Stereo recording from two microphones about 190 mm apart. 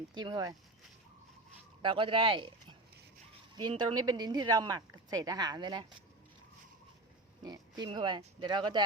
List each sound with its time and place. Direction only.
0.1 s speech: 25° right (ahead or behind)
1.8 s speech: 25° right (ahead or behind)
7.4 s speech: 20° right (ahead or behind)